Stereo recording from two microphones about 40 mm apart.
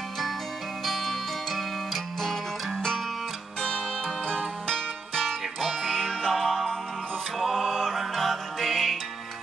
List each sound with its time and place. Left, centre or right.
0.8 s music: centre
3.6 s music: centre
5.2 s music: centre